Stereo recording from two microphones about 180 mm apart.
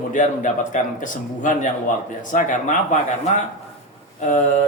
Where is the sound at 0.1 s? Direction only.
45° left (ahead or behind).